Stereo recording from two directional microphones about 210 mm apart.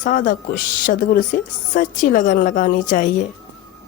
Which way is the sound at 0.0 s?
40° left (ahead or behind).